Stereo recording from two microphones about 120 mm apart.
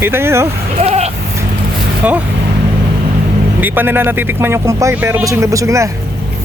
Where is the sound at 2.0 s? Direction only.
10° right (ahead or behind).